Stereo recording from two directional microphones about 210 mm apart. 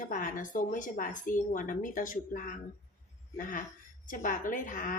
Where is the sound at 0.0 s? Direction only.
40° left (ahead or behind).